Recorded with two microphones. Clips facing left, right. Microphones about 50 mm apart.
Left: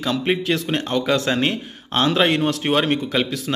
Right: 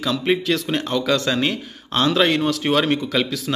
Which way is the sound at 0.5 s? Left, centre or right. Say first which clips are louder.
Even; left.